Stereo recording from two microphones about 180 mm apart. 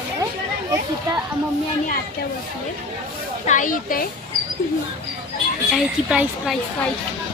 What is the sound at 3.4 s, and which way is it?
Speech, 45° left (ahead or behind).